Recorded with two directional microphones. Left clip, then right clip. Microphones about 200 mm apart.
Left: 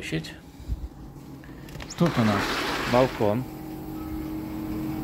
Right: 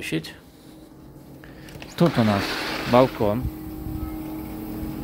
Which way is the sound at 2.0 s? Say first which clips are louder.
Right 3 dB; 30° right (ahead or behind).